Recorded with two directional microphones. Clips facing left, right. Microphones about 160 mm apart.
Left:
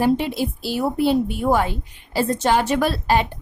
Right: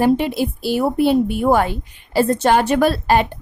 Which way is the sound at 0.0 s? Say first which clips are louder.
Right 3 dB; 55° right (ahead or behind).